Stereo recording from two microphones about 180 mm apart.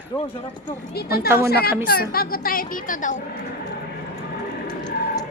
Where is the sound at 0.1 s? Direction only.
20° left (ahead or behind).